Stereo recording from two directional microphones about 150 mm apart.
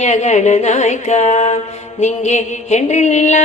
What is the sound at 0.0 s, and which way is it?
Music, 50° left (ahead or behind).